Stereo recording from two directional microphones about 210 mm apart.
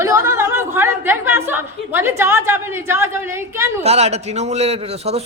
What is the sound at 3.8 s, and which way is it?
A man's voice, 30° right (ahead or behind).